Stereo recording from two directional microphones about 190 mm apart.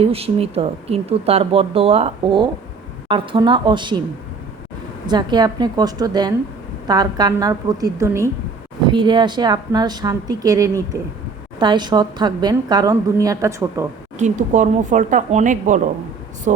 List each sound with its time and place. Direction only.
0.0 s a woman's voice: 30° right (ahead or behind)
5.0 s a woman's voice: 25° right (ahead or behind)
14.2 s speech: 40° right (ahead or behind)